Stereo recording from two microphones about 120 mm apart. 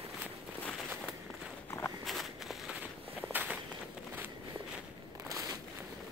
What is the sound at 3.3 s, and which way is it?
Walk, 15° right (ahead or behind).